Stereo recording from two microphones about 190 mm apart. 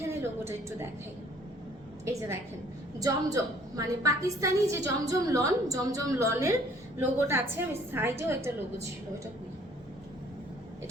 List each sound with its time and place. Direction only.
0.1 s a woman's voice: 15° right (ahead or behind)
2.0 s a woman's voice: 15° right (ahead or behind)